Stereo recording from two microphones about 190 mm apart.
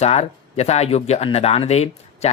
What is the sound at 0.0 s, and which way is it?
Speech, 35° left (ahead or behind).